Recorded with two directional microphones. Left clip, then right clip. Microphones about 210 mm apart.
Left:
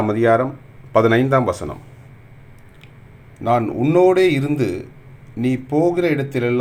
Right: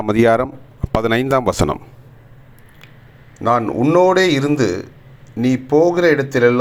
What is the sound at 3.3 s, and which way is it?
A man's voice, 10° right (ahead or behind).